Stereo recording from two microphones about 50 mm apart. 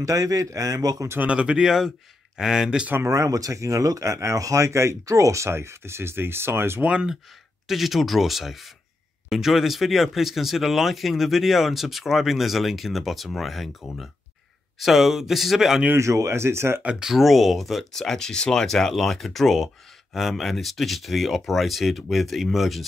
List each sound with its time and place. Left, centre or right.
0.1 s speech: right
1.2 s speech: right
3.2 s speech: right
5.5 s speech: right
7.6 s speech: centre
16.0 s speech: right
17.0 s speech: centre